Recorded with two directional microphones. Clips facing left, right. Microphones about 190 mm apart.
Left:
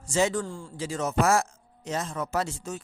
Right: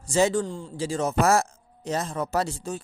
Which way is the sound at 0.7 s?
30° right (ahead or behind).